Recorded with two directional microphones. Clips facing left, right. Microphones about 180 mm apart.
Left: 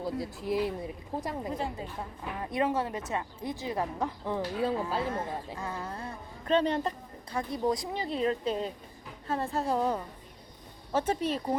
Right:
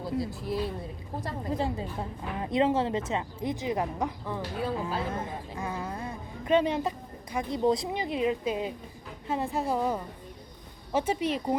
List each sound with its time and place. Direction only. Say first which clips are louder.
0.0 s speech: right 2 dB; 15° left (ahead or behind)
1.5 s a woman's voice: right 4 dB; 30° right (ahead or behind); by 11.5 s 15° right (ahead or behind)